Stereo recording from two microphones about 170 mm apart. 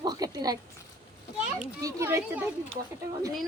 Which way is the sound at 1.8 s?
20° right (ahead or behind).